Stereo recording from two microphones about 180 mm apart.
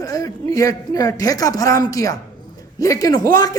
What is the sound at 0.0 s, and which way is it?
A man's voice, 20° left (ahead or behind).